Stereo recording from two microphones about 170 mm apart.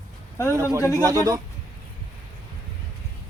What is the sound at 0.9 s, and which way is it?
Speech, 20° right (ahead or behind).